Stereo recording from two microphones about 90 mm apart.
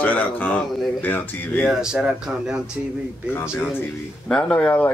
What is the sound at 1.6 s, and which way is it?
Speech, 5° right (ahead or behind).